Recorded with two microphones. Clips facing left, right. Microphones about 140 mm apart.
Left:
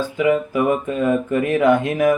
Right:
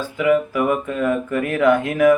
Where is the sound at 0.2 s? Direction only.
25° left (ahead or behind).